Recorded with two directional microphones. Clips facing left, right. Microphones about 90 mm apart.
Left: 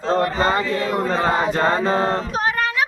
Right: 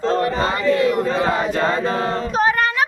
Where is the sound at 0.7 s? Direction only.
35° left (ahead or behind).